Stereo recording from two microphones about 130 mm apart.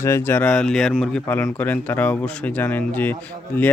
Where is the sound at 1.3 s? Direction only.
15° left (ahead or behind).